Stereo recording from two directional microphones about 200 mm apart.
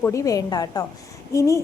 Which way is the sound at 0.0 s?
15° left (ahead or behind).